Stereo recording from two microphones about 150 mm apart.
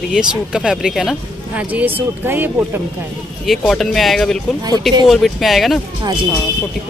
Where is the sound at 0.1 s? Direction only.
5° right (ahead or behind).